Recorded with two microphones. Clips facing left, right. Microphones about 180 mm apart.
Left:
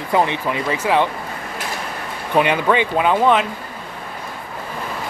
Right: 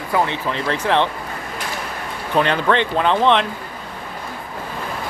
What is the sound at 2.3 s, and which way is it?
Speech, 10° left (ahead or behind).